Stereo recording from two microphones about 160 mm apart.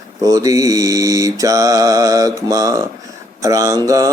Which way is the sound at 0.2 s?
20° right (ahead or behind).